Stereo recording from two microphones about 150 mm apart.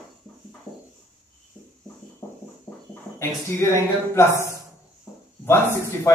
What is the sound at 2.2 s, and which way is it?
Music, 25° left (ahead or behind).